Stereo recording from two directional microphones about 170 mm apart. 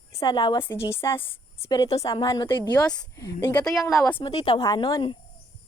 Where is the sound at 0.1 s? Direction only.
20° left (ahead or behind).